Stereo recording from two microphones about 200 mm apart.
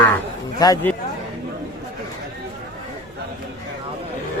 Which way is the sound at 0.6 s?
20° left (ahead or behind).